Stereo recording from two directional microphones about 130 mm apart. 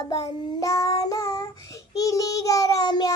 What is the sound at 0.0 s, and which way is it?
Child singing, 30° left (ahead or behind).